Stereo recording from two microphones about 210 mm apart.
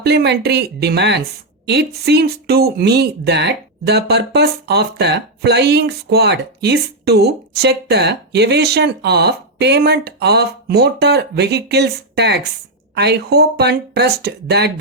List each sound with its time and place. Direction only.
0.0 s speech: 50° right (ahead or behind)